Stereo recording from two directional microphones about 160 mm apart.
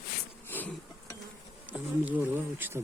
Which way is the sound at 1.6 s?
10° right (ahead or behind).